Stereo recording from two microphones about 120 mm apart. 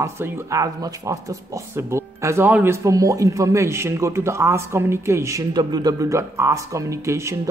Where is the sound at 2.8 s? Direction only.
25° right (ahead or behind).